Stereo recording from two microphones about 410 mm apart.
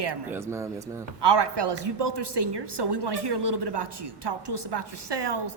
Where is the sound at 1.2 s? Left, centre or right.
Right.